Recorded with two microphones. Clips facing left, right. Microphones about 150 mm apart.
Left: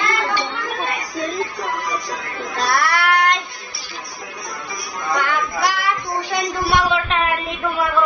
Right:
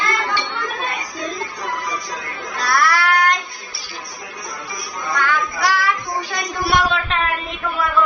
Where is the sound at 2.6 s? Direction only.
25° left (ahead or behind).